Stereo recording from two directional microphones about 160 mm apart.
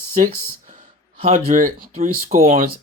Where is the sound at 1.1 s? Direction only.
40° right (ahead or behind).